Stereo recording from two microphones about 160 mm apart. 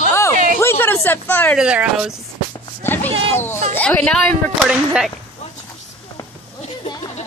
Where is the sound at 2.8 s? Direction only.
10° left (ahead or behind).